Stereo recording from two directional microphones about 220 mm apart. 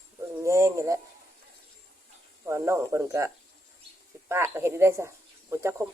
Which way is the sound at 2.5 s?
15° right (ahead or behind).